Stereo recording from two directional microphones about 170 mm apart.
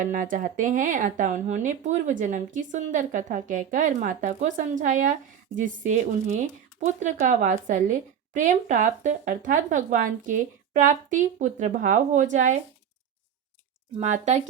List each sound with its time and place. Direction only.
0.0 s speech: 50° right (ahead or behind)
14.0 s speech: 45° right (ahead or behind)